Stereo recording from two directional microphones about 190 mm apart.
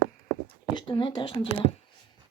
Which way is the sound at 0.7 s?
25° left (ahead or behind).